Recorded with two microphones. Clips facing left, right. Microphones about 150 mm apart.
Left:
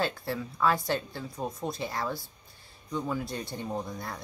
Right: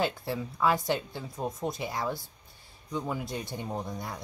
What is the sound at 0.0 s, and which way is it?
Speech, 15° right (ahead or behind).